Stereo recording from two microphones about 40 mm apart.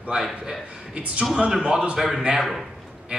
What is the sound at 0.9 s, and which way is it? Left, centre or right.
Speech, right.